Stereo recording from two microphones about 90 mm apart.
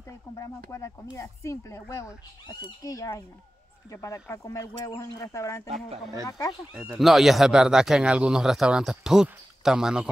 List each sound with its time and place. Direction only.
0.4 s speech: 35° left (ahead or behind)
6.7 s speech: 15° right (ahead or behind)
7.0 s speech: centre (ahead or behind)